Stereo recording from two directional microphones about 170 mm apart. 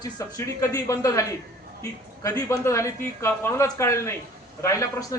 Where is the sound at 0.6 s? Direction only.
20° left (ahead or behind).